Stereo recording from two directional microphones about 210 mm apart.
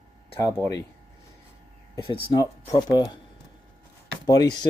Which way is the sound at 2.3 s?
20° left (ahead or behind).